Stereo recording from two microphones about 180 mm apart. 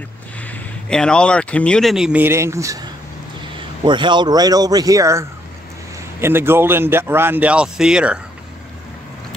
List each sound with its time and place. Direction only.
0.4 s speech: 5° left (ahead or behind); by 5.2 s 15° right (ahead or behind)
6.2 s a man's voice: 15° right (ahead or behind)